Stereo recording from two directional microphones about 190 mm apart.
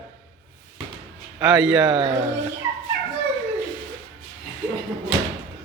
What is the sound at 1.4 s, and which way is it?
Speech, 5° right (ahead or behind).